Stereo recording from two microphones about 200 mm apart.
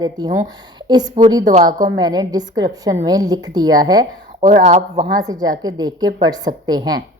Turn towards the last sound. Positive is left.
turn(degrees=-20)  # may be behind; listen again after turning